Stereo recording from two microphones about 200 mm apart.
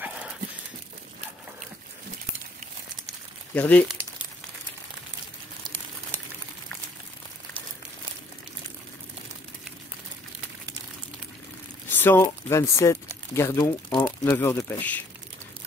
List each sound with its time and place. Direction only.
3.5 s speech: 10° left (ahead or behind)
11.9 s speech: 10° left (ahead or behind)